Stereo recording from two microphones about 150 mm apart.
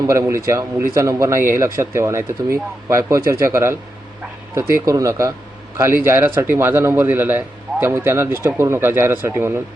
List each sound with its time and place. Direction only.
0.1 s a man's voice: 20° right (ahead or behind)